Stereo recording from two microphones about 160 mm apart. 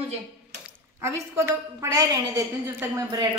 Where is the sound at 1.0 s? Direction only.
20° right (ahead or behind).